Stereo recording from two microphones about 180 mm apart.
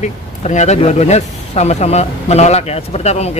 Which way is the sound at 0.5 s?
40° left (ahead or behind).